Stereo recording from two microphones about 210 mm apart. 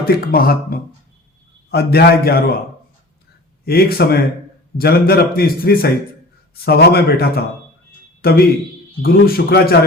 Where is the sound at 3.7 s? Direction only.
45° left (ahead or behind).